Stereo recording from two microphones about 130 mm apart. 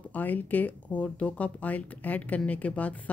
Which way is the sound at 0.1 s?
15° left (ahead or behind).